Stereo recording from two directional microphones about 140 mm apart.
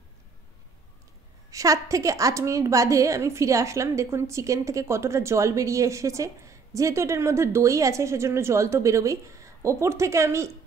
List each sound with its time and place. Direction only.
1.5 s a woman's voice: 25° right (ahead or behind)